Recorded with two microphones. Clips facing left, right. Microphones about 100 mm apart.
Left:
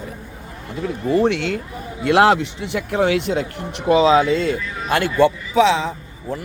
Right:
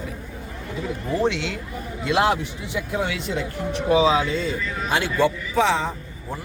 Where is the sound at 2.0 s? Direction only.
70° left (ahead or behind).